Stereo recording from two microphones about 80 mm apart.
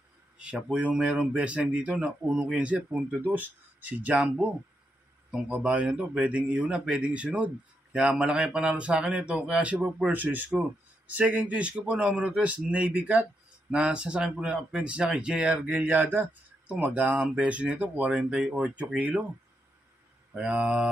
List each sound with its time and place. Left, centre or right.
0.4 s a man's voice: centre
20.3 s a man's voice: centre